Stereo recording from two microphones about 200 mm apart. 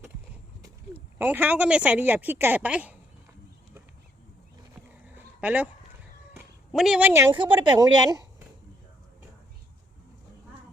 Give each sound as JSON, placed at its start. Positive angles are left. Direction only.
{"t": 1.2, "sound": "speech", "side_deg": -10}
{"t": 5.0, "sound": "a sound", "side_deg": -5}
{"t": 6.7, "sound": "speech", "side_deg": -5}
{"t": 7.3, "sound": "a woman's voice", "side_deg": -25}